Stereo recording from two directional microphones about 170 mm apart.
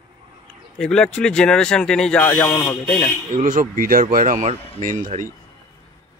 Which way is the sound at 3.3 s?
50° right (ahead or behind).